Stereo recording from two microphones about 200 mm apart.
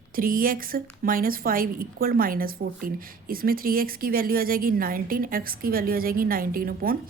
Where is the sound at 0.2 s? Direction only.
45° right (ahead or behind).